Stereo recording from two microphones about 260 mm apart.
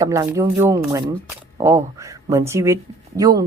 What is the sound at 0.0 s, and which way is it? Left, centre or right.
Speech, centre.